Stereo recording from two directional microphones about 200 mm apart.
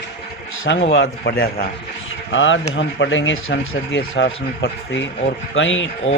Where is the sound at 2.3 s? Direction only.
70° left (ahead or behind).